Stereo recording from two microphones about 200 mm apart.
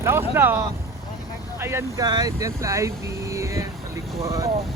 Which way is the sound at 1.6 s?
15° right (ahead or behind).